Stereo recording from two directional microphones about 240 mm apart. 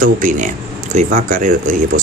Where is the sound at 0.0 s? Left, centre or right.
Right.